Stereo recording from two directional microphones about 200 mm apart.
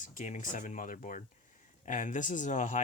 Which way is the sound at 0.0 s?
40° left (ahead or behind).